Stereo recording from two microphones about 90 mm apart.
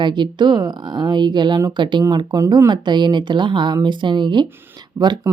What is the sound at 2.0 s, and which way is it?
Speech, 45° right (ahead or behind).